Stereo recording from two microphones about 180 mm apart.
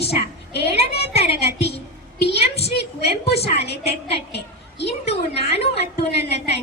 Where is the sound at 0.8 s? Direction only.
35° left (ahead or behind).